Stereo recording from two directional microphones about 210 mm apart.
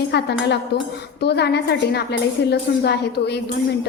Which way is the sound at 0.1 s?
55° left (ahead or behind).